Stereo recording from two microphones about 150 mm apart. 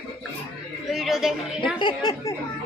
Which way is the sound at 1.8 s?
30° left (ahead or behind).